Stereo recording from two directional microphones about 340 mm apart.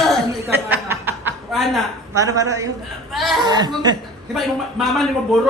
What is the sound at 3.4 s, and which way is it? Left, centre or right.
Speech, centre.